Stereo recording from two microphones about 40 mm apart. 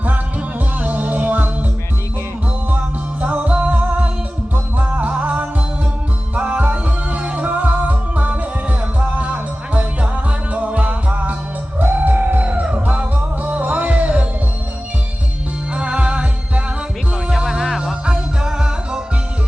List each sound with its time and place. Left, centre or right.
0.8 s music: right
3.2 s music: right
7.4 s music: right
11.8 s music: right
15.7 s music: right
17.3 s music: centre
18.0 s music: centre